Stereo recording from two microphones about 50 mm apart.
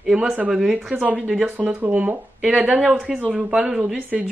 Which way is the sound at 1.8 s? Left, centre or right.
Right.